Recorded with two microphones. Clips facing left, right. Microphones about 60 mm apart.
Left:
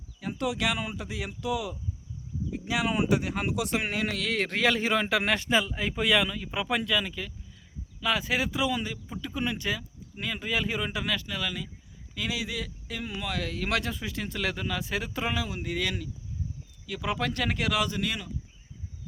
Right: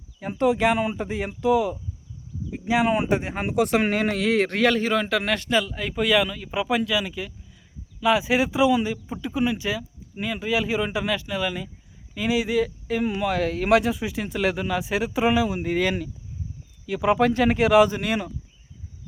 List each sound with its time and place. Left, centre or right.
0.2 s speech: right
3.5 s speech: right
4.4 s speech: centre; by 15.6 s right
15.6 s speech: right